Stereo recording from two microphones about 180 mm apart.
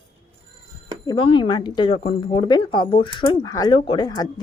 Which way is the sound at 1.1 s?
25° left (ahead or behind).